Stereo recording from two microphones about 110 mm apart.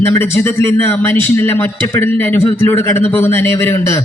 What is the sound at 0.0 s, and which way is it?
A man's voice, 20° left (ahead or behind).